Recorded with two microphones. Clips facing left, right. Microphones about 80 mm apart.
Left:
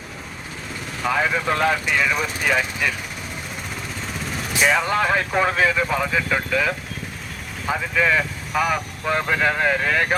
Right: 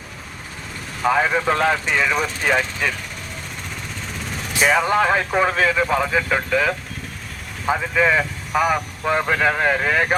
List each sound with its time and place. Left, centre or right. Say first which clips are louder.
1.0 s speech: right 3 dB; centre
2.8 s speech: right 1 dB; centre
4.6 s speech: right 3 dB; centre